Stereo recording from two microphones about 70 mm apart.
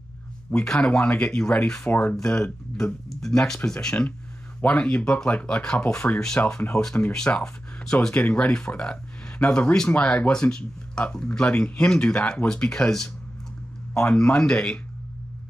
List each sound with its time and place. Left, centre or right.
0.5 s speech: centre
1.9 s speech: left
2.1 s speech: centre
8.1 s speech: left